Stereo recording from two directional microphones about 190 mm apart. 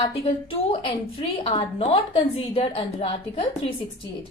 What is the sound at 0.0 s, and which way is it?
A woman's voice, 25° left (ahead or behind).